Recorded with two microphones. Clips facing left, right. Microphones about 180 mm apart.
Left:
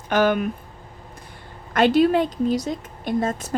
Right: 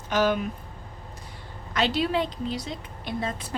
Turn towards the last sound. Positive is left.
turn(degrees=45)  # may be behind; listen again after turning